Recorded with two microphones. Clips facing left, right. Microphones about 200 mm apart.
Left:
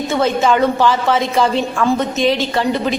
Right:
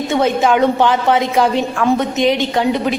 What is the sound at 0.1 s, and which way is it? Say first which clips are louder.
A woman's voice: right 1 dB; 15° right (ahead or behind).